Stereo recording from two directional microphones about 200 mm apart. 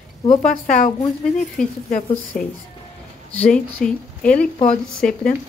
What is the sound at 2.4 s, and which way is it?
Speech, 40° left (ahead or behind).